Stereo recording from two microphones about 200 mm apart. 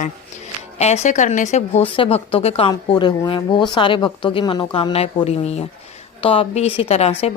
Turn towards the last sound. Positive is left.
turn(degrees=30)  # may be behind; listen again after turning